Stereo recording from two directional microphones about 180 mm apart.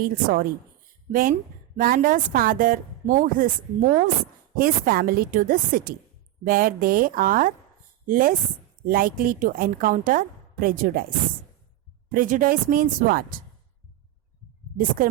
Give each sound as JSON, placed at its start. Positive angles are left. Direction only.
{"t": 0.0, "sound": "a woman's voice", "side_deg": -55}
{"t": 12.1, "sound": "a woman's voice", "side_deg": -50}